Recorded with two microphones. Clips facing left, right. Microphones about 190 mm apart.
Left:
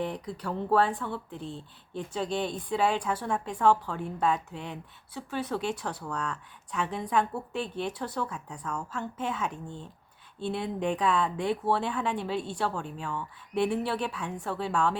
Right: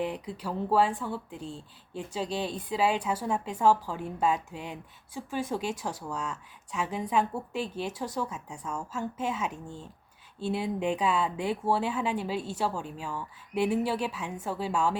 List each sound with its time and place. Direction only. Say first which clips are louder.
0.4 s a woman's voice: even; 10° right (ahead or behind)
1.4 s speech: left 1 dB; 40° right (ahead or behind)
2.1 s a woman's voice: left 1 dB; 10° right (ahead or behind)